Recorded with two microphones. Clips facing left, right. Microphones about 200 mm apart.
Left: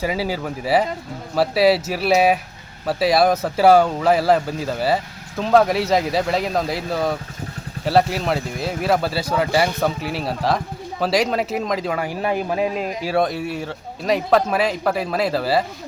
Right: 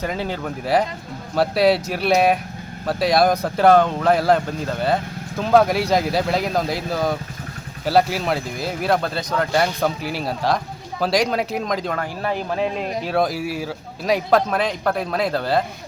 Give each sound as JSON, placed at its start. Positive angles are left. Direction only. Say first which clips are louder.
{"t": 0.0, "sound": "a man's voice", "louder": "left 2 dB", "side_deg": 5}
{"t": 13.1, "sound": "a man's voice", "louder": "left 1 dB", "side_deg": 0}